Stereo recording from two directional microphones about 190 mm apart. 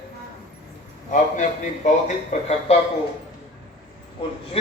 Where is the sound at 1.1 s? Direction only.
40° left (ahead or behind).